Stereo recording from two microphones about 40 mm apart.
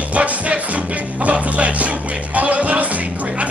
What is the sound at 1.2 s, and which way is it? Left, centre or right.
Music, right.